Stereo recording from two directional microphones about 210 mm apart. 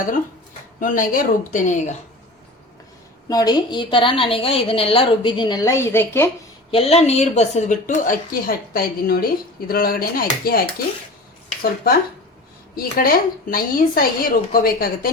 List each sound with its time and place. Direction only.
0.8 s a woman's voice: 40° left (ahead or behind)
3.2 s a woman's voice: 20° left (ahead or behind)
6.7 s a woman's voice: 30° left (ahead or behind); by 15.1 s 45° left (ahead or behind)